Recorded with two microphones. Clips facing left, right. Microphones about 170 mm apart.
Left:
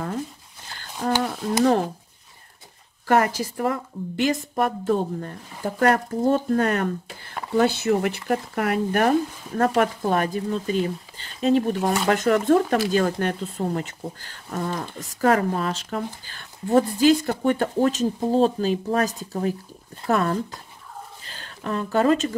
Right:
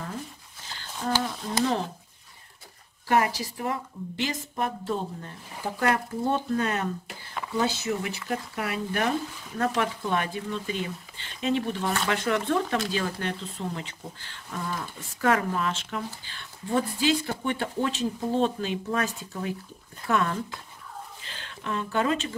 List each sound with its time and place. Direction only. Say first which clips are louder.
1.0 s a woman's voice: left 5 dB; 45° left (ahead or behind)
3.1 s a woman's voice: left 4 dB; 50° left (ahead or behind)
21.2 s a sound: left 4 dB; 40° left (ahead or behind)